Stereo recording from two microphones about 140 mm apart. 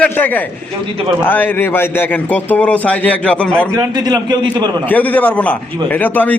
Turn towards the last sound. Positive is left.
turn(degrees=10)  # may be behind; listen again after turning